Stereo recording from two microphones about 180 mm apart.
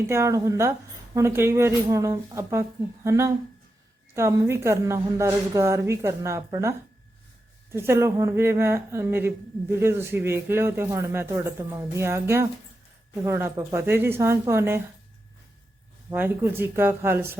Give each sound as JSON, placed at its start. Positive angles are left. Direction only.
{"t": 0.1, "sound": "a woman's voice", "side_deg": -15}
{"t": 16.0, "sound": "a woman's voice", "side_deg": -10}